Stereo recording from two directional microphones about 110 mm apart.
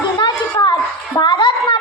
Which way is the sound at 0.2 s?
45° left (ahead or behind).